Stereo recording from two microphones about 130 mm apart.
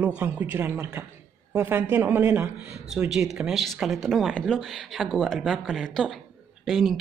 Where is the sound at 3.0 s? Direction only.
5° right (ahead or behind).